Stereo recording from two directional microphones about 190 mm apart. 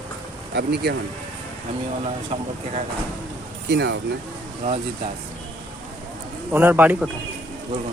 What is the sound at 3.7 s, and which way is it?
Speech, 60° right (ahead or behind).